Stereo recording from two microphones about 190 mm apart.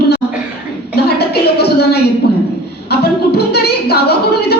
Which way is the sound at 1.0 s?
55° left (ahead or behind).